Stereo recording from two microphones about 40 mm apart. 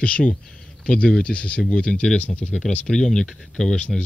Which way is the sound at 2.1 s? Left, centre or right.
Left.